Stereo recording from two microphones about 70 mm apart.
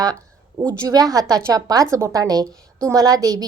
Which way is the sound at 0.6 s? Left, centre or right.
Right.